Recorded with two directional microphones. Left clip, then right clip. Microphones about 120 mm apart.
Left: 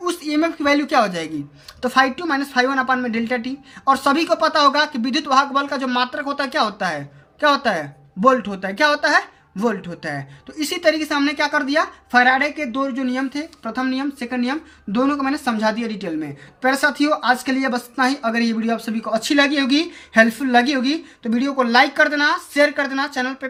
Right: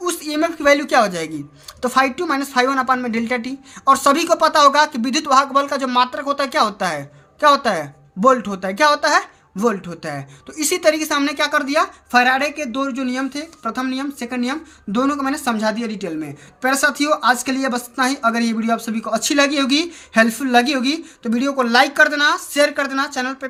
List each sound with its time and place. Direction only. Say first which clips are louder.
0.0 s a woman's voice: even; 40° right (ahead or behind)
10.6 s speech: right 2 dB; 45° right (ahead or behind); by 16.3 s 20° right (ahead or behind)
16.6 s speech: right 1 dB; 30° right (ahead or behind)